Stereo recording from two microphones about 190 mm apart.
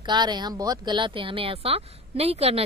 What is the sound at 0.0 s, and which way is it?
Speech, 25° right (ahead or behind).